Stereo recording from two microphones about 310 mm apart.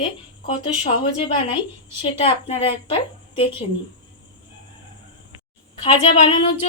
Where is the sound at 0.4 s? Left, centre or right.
Centre.